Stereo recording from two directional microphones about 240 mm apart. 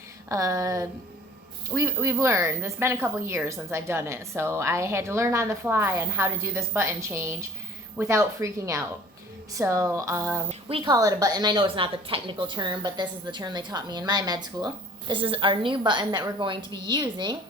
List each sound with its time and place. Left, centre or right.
0.3 s speech: centre
10.5 s a woman's voice: right